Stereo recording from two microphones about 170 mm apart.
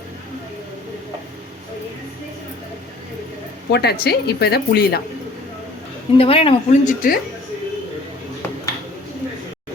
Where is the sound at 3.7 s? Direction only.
70° left (ahead or behind).